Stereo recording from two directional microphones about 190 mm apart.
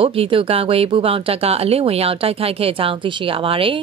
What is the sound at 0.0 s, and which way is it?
Speech, 30° right (ahead or behind).